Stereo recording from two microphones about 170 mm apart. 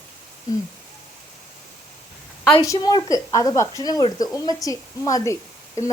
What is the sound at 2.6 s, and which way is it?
Speech, 25° left (ahead or behind).